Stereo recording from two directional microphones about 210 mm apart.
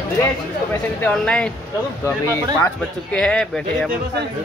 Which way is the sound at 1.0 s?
5° left (ahead or behind).